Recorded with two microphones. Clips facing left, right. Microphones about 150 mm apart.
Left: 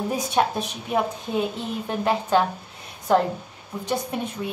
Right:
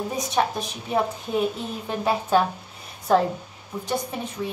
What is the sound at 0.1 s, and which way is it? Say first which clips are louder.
A woman's voice: left 2 dB; centre (ahead or behind).